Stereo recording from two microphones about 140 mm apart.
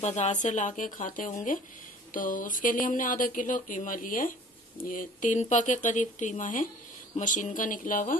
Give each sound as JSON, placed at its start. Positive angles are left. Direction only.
{"t": 0.0, "sound": "speech", "side_deg": 55}